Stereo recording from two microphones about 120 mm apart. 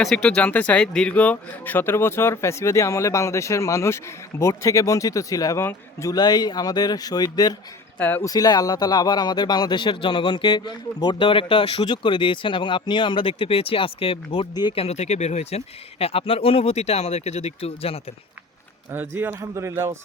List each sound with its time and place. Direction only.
0.0 s speech: 5° left (ahead or behind); by 7.5 s 30° left (ahead or behind)
7.9 s speech: 15° left (ahead or behind)
8.2 s speech: 30° left (ahead or behind); by 11.9 s 50° left (ahead or behind)
11.9 s speech: 40° left (ahead or behind)
14.5 s speech: 35° left (ahead or behind)
14.8 s speech: 65° left (ahead or behind)
18.9 s a man's voice: 15° right (ahead or behind)